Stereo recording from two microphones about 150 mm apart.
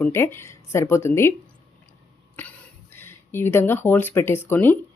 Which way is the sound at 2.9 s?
15° left (ahead or behind).